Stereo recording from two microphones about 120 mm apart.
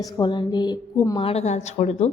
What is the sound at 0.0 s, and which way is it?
A woman's voice, 35° left (ahead or behind).